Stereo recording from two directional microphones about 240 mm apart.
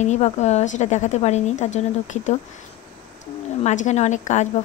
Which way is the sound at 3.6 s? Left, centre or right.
Left.